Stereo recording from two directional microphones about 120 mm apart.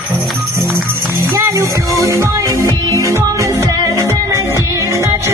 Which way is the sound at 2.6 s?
25° left (ahead or behind).